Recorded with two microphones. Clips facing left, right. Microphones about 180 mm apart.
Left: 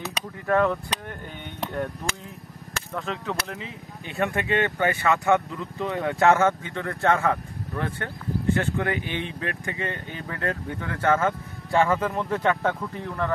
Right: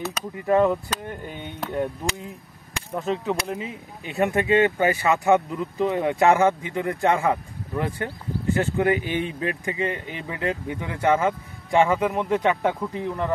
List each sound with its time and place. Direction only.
0.5 s speech: 15° right (ahead or behind)